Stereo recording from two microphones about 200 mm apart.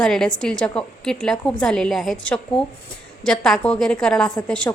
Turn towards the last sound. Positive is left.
turn(degrees=5)  # may be behind; listen again after turning